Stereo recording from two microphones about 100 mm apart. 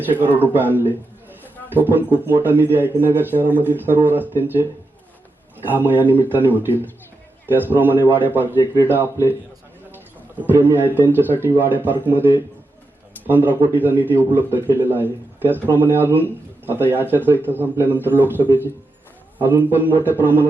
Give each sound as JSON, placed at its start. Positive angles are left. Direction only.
{"t": 0.0, "sound": "a man's voice", "side_deg": -20}
{"t": 5.6, "sound": "a man's voice", "side_deg": -20}
{"t": 10.4, "sound": "a man's voice", "side_deg": -20}
{"t": 19.4, "sound": "a man's voice", "side_deg": -20}